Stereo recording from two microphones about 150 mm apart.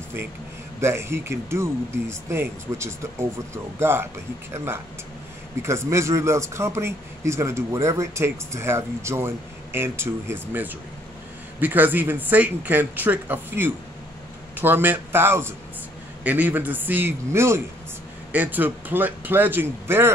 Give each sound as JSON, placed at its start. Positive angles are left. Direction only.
{"t": 0.7, "sound": "speech", "side_deg": -15}
{"t": 5.6, "sound": "speech", "side_deg": -20}